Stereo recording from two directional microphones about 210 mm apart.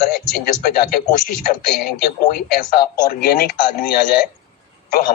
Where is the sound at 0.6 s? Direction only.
45° left (ahead or behind).